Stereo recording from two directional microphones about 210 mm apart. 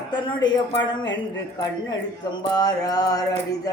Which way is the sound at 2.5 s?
20° left (ahead or behind).